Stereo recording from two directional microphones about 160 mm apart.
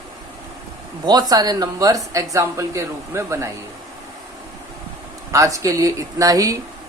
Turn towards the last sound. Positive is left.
turn(degrees=-20)  # may be behind; listen again after turning